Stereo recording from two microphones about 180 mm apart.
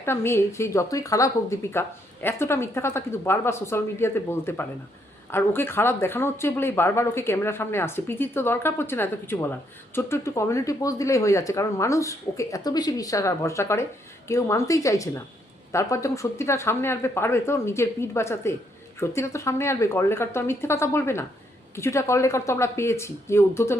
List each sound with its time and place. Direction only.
0.0 s speech: 15° left (ahead or behind)